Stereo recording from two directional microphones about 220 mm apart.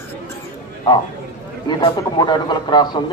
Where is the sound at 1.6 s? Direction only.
20° left (ahead or behind).